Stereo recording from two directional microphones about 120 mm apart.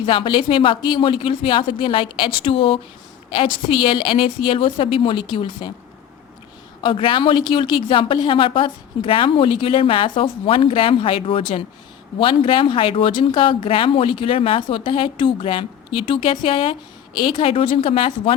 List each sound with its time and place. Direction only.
0.0 s speech: 45° left (ahead or behind)
6.8 s speech: 45° left (ahead or behind)